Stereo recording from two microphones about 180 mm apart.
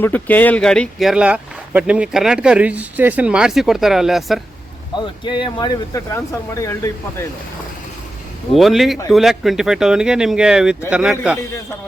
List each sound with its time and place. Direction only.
0.0 s speech: 10° left (ahead or behind)
4.9 s speech: 25° left (ahead or behind)
8.5 s speech: centre (ahead or behind)